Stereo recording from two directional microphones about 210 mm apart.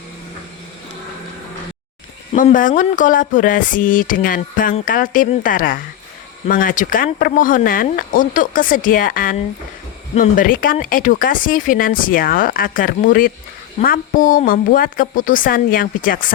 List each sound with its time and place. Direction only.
2.3 s speech: 40° left (ahead or behind)